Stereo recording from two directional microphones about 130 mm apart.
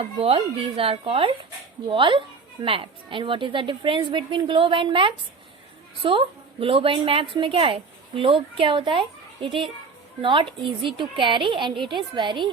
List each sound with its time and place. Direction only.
0.0 s a woman's voice: 50° right (ahead or behind)